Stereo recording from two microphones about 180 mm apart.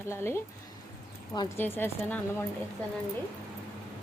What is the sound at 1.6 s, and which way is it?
Speech, 10° left (ahead or behind).